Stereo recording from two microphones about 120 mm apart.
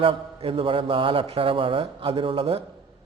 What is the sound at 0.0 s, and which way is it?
A man's voice, 50° right (ahead or behind).